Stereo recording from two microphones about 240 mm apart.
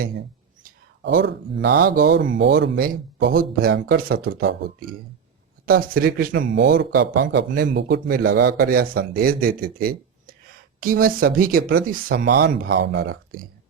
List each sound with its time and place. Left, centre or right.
0.6 s speech: right
5.6 s speech: right